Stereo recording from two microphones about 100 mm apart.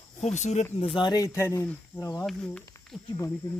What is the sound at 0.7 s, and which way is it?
Speech, 70° left (ahead or behind).